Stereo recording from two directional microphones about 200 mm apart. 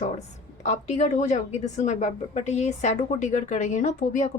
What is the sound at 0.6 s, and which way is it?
A woman's voice, 35° left (ahead or behind).